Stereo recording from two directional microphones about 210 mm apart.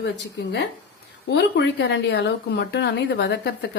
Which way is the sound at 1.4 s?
55° left (ahead or behind).